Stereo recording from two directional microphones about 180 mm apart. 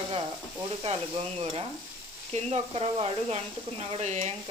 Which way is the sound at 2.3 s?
35° right (ahead or behind).